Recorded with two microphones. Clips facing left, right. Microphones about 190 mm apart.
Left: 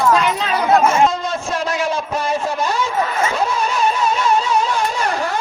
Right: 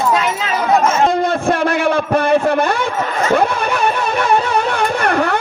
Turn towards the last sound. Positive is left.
turn(degrees=-60)  # may be behind; listen again after turning